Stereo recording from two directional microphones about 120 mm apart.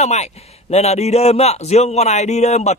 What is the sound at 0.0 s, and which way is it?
A man's voice, 70° left (ahead or behind).